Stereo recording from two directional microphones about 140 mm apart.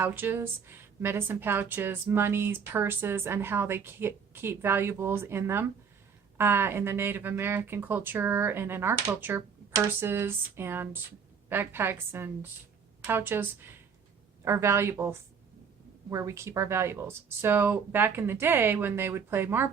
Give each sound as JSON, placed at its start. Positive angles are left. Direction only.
{"t": 0.0, "sound": "speech", "side_deg": -15}